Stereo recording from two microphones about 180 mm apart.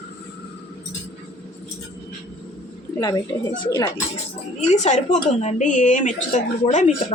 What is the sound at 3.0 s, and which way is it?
Speech, 20° left (ahead or behind).